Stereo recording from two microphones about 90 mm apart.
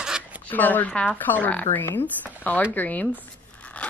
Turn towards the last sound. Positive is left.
turn(degrees=10)  # may be behind; listen again after turning